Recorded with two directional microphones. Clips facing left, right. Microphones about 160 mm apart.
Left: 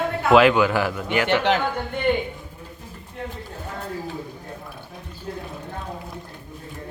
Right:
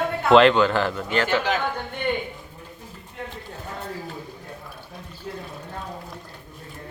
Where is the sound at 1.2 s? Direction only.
65° left (ahead or behind).